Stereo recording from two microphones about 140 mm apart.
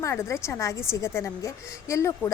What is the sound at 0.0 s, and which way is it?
A woman's voice, 20° left (ahead or behind).